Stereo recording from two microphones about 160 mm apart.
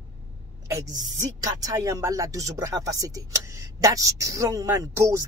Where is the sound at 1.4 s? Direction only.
25° right (ahead or behind).